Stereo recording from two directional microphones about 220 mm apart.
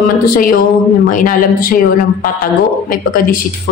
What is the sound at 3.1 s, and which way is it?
Speech, 40° left (ahead or behind).